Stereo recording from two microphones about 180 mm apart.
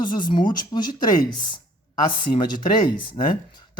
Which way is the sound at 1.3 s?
25° left (ahead or behind).